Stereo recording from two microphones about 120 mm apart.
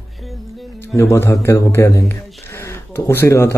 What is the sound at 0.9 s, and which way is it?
A man's voice, 25° left (ahead or behind).